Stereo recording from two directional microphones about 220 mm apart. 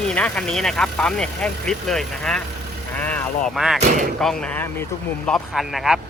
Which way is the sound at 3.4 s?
Centre (ahead or behind).